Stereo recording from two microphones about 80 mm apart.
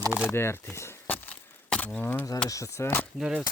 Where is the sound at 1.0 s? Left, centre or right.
Left.